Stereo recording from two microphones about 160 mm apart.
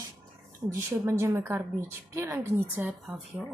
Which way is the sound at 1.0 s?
15° right (ahead or behind).